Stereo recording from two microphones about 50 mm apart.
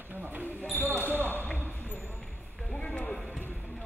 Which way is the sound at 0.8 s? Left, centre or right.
Right.